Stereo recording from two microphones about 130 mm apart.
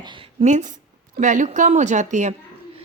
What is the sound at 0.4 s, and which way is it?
A woman's voice, 70° right (ahead or behind).